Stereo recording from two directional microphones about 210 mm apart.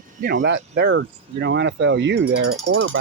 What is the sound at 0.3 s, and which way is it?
Speech, 55° right (ahead or behind).